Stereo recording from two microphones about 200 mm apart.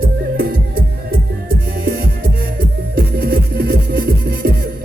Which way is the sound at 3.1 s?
50° right (ahead or behind).